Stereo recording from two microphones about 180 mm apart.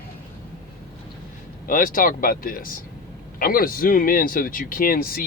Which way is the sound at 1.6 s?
50° left (ahead or behind).